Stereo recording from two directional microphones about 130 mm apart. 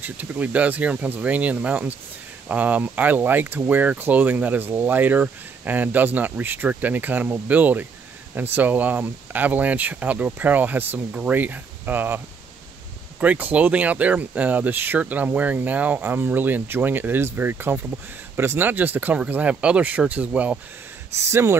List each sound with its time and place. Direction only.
0.0 s speech: 15° right (ahead or behind)
13.2 s speech: 10° right (ahead or behind)